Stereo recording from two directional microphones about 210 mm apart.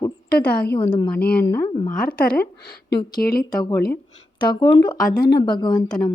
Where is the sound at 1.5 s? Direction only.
10° left (ahead or behind).